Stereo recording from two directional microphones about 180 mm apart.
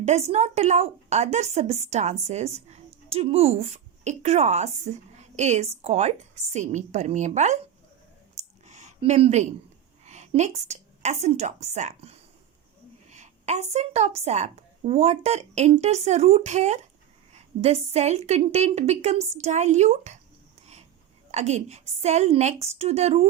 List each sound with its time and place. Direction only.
0.0 s a woman's voice: 40° right (ahead or behind)
8.4 s a sound: 40° right (ahead or behind)
10.1 s a woman's voice: 40° right (ahead or behind)
21.2 s a woman's voice: 40° right (ahead or behind)